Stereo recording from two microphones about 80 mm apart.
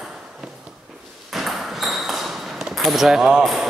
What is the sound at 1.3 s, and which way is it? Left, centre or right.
Ping, centre.